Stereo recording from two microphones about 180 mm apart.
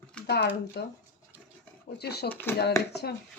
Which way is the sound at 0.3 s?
65° left (ahead or behind).